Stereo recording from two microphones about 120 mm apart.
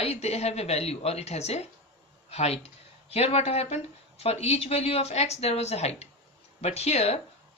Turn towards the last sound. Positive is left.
turn(degrees=60)  # may be behind; listen again after turning